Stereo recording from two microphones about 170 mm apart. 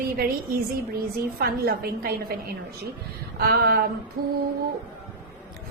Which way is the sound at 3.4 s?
65° right (ahead or behind).